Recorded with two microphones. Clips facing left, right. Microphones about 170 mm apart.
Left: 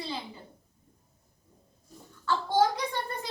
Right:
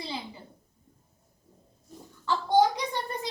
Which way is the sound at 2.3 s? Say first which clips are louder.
Right 4 dB; 20° right (ahead or behind).